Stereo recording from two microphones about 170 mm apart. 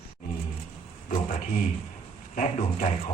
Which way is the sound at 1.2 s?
55° left (ahead or behind).